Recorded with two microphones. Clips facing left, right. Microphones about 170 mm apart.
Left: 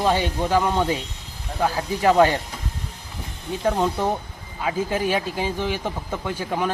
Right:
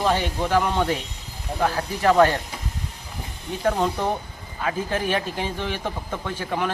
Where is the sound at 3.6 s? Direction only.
10° left (ahead or behind).